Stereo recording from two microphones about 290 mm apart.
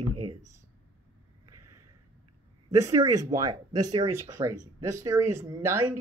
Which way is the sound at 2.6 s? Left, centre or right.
Centre.